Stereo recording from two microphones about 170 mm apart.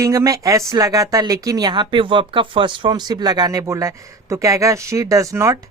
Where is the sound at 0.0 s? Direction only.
20° right (ahead or behind).